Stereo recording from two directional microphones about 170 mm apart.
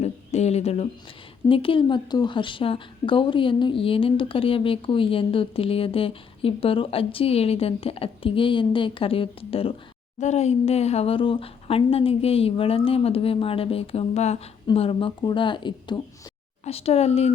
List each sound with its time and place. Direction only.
0.0 s a woman's voice: 40° left (ahead or behind)